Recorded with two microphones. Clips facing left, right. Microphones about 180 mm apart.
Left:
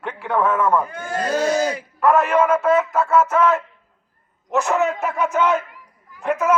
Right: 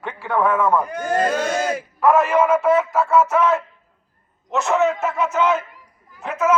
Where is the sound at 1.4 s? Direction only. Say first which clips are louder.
Left 3 dB; 35° left (ahead or behind).